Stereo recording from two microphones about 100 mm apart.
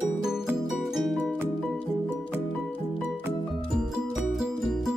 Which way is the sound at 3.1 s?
Centre (ahead or behind).